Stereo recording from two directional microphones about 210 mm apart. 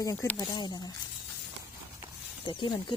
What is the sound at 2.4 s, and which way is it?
Speech, 20° left (ahead or behind).